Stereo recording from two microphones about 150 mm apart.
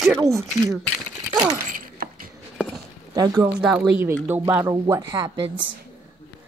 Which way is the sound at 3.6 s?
10° right (ahead or behind).